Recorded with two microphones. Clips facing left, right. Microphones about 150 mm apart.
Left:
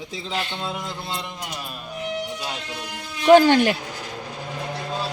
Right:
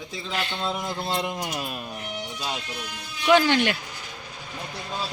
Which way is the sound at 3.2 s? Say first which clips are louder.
Left 6 dB; 45° left (ahead or behind).